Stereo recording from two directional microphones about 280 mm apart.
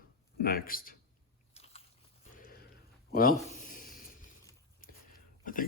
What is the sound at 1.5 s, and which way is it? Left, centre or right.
Biting, left.